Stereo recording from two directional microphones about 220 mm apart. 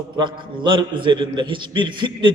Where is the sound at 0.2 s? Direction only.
20° right (ahead or behind).